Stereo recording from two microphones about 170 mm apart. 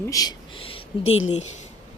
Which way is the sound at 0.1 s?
25° left (ahead or behind).